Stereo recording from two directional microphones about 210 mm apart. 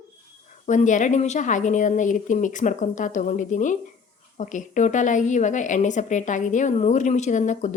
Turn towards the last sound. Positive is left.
turn(degrees=35)  # may be behind; listen again after turning